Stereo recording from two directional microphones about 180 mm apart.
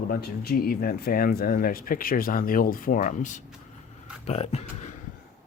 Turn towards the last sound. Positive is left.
turn(degrees=40)  # may be behind; listen again after turning